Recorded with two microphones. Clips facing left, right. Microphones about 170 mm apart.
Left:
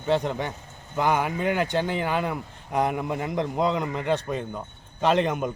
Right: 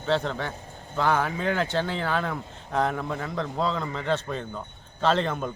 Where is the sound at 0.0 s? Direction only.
15° left (ahead or behind).